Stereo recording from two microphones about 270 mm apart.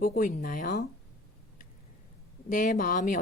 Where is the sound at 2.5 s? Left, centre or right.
Left.